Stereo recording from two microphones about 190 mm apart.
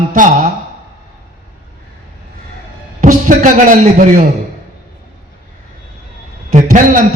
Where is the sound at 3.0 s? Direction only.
45° right (ahead or behind).